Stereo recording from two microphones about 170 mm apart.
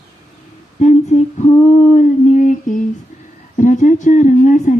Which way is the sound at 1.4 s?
40° left (ahead or behind).